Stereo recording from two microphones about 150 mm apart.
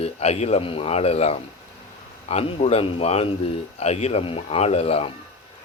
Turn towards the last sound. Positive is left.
turn(degrees=40)  # may be behind; listen again after turning